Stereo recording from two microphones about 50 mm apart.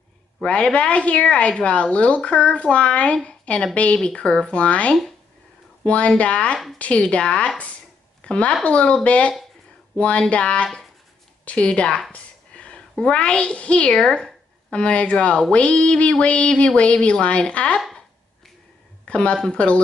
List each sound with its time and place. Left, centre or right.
0.4 s a woman's voice: left
12.1 s a sound: left
12.7 s a woman's voice: centre
19.0 s a woman's voice: left